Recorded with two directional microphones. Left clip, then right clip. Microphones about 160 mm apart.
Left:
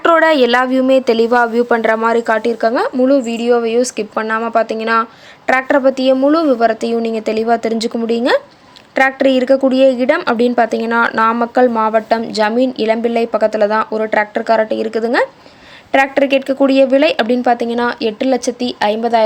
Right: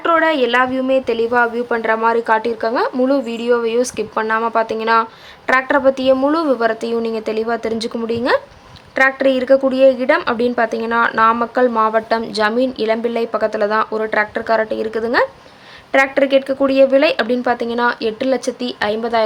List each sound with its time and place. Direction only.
0.0 s a woman's voice: 45° left (ahead or behind); by 19.2 s 15° left (ahead or behind)